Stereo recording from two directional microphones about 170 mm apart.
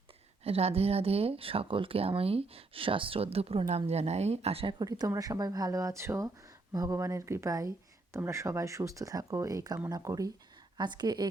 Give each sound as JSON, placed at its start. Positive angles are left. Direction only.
{"t": 0.4, "sound": "speech", "side_deg": -35}
{"t": 4.8, "sound": "speech", "side_deg": -20}